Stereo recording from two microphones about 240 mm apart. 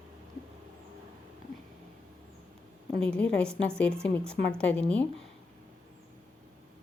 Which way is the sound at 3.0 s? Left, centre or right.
Centre.